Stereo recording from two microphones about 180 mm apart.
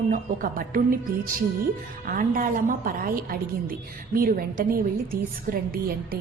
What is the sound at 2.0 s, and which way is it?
A woman's voice, 50° right (ahead or behind).